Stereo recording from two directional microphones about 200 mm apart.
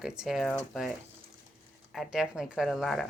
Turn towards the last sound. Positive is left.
turn(degrees=0)  # may be behind; listen again after turning